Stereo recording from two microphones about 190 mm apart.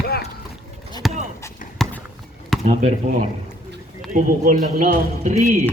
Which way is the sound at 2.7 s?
35° right (ahead or behind).